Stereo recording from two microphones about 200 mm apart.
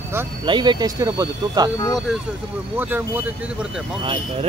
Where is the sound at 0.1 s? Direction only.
10° right (ahead or behind).